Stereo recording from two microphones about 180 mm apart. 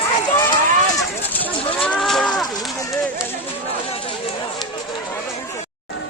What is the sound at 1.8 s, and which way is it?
Livestock, 5° left (ahead or behind).